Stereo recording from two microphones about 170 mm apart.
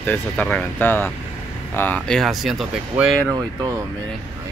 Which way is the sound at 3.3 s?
20° right (ahead or behind).